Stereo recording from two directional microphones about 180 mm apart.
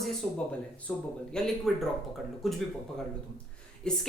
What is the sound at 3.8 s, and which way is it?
Speech, 5° left (ahead or behind).